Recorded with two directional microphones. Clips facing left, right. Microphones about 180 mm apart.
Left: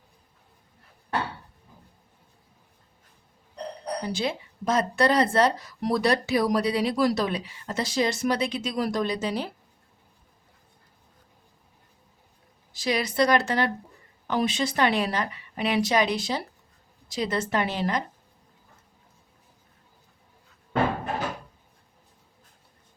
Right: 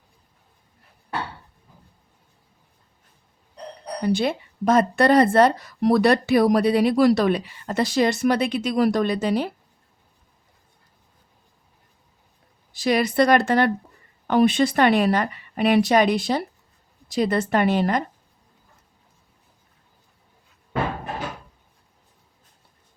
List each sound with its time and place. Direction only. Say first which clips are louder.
4.1 s speech: right 6 dB; 55° right (ahead or behind)
12.7 s speech: right 6 dB; 55° right (ahead or behind)